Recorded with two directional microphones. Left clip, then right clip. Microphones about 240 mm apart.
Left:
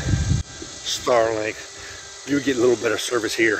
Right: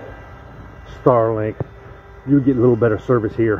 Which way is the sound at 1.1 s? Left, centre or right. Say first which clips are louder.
Left 1 dB; left.